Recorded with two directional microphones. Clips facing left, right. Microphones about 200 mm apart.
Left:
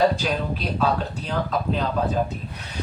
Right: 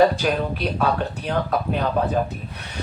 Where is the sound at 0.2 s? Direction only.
55° right (ahead or behind).